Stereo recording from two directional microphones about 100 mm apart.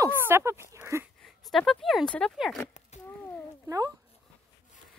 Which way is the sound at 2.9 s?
90° left.